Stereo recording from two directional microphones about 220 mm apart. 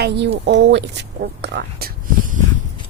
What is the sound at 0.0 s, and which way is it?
A woman's voice, 50° right (ahead or behind).